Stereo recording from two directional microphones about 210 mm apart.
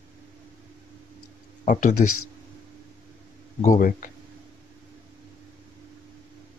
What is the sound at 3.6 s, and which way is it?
Speech, 35° left (ahead or behind).